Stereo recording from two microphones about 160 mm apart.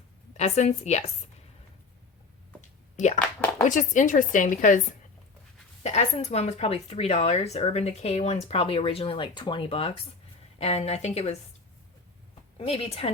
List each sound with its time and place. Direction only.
0.3 s speech: 45° left (ahead or behind)
2.9 s a sound: 50° left (ahead or behind)
3.6 s speech: 50° left (ahead or behind)
5.8 s speech: 45° left (ahead or behind)
12.5 s speech: 40° left (ahead or behind)